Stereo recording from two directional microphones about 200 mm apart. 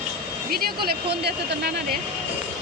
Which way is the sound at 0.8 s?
55° right (ahead or behind).